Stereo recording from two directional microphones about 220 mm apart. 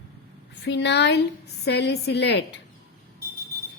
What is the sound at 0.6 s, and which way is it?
Speech, 50° left (ahead or behind).